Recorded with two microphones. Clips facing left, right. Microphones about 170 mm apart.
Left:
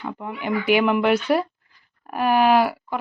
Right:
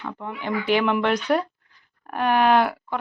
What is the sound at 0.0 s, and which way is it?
A woman's voice, 10° left (ahead or behind).